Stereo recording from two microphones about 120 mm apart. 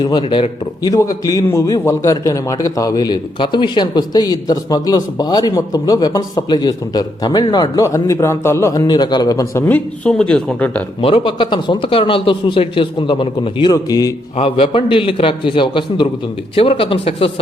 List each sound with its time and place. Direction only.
0.0 s a man's voice: 40° left (ahead or behind)
0.8 s a man's voice: 30° left (ahead or behind)
9.6 s speech: 10° left (ahead or behind)
11.0 s speech: 45° left (ahead or behind)
13.7 s a man's voice: 30° left (ahead or behind)
14.3 s speech: 50° left (ahead or behind)